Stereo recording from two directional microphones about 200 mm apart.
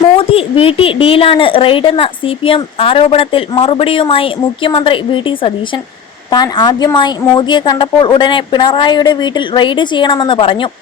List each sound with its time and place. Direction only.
0.2 s a woman's voice: 30° left (ahead or behind)